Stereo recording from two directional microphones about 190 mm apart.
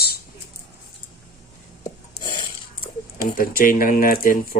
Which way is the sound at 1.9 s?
25° left (ahead or behind).